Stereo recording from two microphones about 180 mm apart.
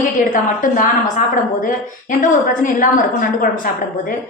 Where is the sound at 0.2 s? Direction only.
50° left (ahead or behind).